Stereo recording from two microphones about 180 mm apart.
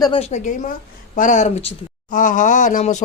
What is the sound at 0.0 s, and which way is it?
A woman's voice, 30° left (ahead or behind).